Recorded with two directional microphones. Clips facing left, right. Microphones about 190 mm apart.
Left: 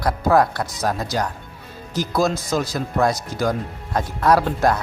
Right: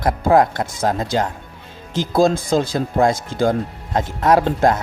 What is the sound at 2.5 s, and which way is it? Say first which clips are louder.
Speech: right 4 dB; 30° right (ahead or behind).